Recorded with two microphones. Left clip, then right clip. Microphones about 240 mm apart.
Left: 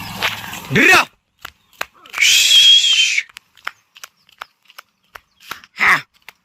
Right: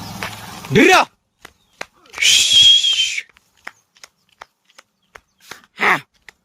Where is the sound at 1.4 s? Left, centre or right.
Centre.